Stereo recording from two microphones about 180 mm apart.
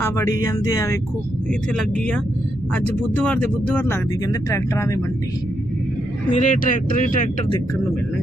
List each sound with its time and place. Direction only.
0.0 s speech: 15° left (ahead or behind)
1.7 s speech: 5° left (ahead or behind)
3.2 s speech: 10° left (ahead or behind)
6.3 s speech: 45° left (ahead or behind)